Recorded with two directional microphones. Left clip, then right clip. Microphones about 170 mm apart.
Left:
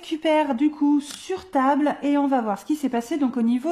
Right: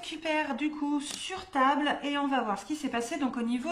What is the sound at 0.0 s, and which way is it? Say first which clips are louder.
Speech: left 10 dB; 40° left (ahead or behind).